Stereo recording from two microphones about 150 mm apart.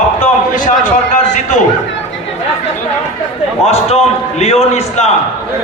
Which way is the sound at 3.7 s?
45° left (ahead or behind).